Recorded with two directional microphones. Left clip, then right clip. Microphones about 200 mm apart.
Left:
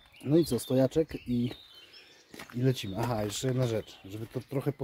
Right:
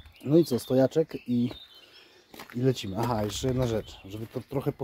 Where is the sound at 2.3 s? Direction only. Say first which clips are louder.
Right 2 dB; 25° right (ahead or behind).